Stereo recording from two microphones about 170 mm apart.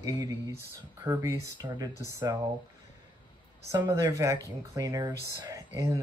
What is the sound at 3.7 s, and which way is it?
Speech, 20° right (ahead or behind).